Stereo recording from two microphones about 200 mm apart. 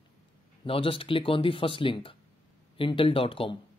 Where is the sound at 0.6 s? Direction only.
25° left (ahead or behind).